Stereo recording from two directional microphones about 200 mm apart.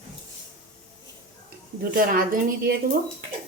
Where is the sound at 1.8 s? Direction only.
45° right (ahead or behind).